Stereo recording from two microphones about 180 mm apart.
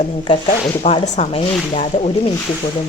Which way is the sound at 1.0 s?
40° left (ahead or behind).